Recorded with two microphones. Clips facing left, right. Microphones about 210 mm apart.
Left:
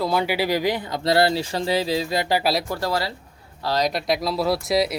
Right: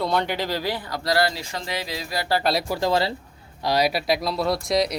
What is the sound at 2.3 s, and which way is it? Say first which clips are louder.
Speech: right 1 dB; 5° left (ahead or behind).